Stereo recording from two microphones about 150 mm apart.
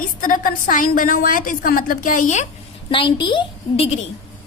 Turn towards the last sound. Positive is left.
turn(degrees=40)  # may be behind; listen again after turning